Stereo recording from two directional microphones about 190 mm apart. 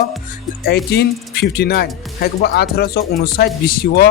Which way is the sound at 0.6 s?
55° left (ahead or behind).